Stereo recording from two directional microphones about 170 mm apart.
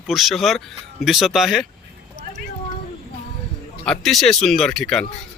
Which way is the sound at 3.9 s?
Centre (ahead or behind).